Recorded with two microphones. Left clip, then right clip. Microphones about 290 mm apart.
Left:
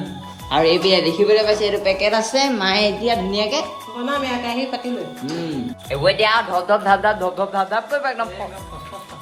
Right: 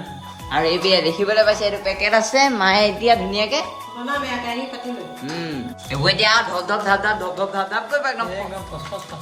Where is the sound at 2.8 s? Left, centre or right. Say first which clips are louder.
Right 2 dB; centre.